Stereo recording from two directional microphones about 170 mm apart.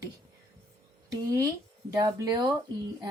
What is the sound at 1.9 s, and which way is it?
Speech, 20° right (ahead or behind).